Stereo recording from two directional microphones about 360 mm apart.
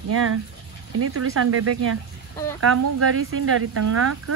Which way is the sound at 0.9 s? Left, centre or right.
Right.